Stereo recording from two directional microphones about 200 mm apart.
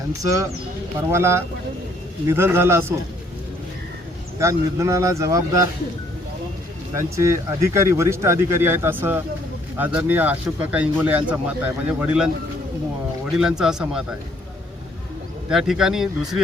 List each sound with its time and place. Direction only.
0.2 s speech: 15° right (ahead or behind)
4.4 s speech: 15° right (ahead or behind)
6.9 s speech: 15° right (ahead or behind)
13.3 s speech: 5° right (ahead or behind)
15.4 s speech: centre (ahead or behind)